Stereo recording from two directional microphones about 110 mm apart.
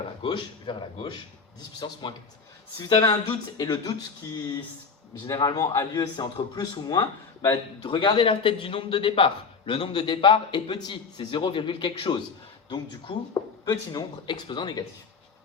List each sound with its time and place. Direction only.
0.2 s a man's voice: 45° left (ahead or behind)
5.3 s a man's voice: 35° left (ahead or behind)